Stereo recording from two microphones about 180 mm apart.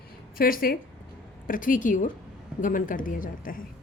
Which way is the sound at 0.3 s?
50° left (ahead or behind).